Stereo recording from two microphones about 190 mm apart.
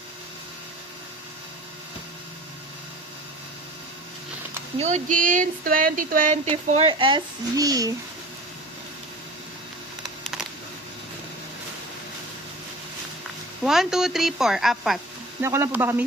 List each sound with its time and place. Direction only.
4.8 s speech: 40° right (ahead or behind); by 7.9 s 20° right (ahead or behind)
13.7 s a woman's voice: centre (ahead or behind)
15.4 s speech: 15° right (ahead or behind)